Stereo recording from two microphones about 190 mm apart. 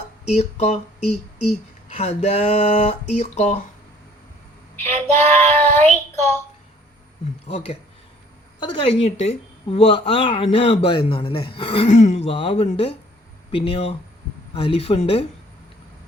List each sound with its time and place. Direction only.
0.3 s speech: 35° left (ahead or behind)
4.9 s child singing: 35° right (ahead or behind)
5.7 s child singing: 10° left (ahead or behind)
7.4 s a woman's voice: 35° left (ahead or behind)